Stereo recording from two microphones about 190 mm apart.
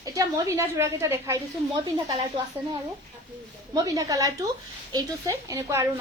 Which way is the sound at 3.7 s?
20° right (ahead or behind).